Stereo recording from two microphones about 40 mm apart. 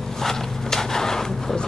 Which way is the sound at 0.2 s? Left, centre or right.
Centre.